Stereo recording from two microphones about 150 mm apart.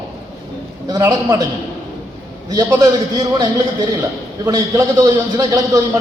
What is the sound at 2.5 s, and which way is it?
A man's voice, 25° right (ahead or behind).